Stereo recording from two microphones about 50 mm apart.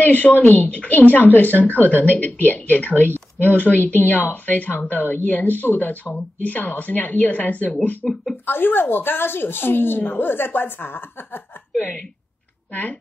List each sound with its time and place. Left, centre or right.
0.0 s speech: left
8.0 s speech: centre
8.5 s a woman's voice: left